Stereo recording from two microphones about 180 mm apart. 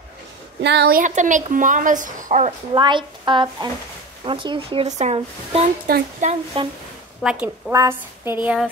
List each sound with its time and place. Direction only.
0.6 s a woman's voice: 70° right (ahead or behind)
1.0 s a woman's voice: 45° right (ahead or behind)
2.7 s a woman's voice: 25° right (ahead or behind)
5.9 s speech: 55° right (ahead or behind)
6.2 s speech: 30° right (ahead or behind)
7.2 s a woman's voice: 5° right (ahead or behind)
7.7 s a woman's voice: 20° right (ahead or behind)